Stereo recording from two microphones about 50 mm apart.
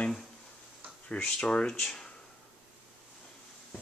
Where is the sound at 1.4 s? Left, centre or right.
Centre.